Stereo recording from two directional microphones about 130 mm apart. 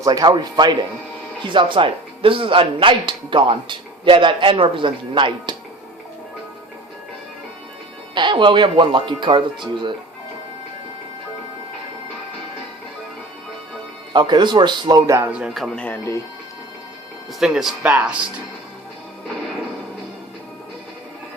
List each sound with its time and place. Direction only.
0.0 s speech: 30° right (ahead or behind)
8.1 s speech: 35° right (ahead or behind)
14.1 s speech: 35° right (ahead or behind)
15.3 s speech: 10° right (ahead or behind); by 16.0 s 10° left (ahead or behind)
17.4 s speech: 5° right (ahead or behind)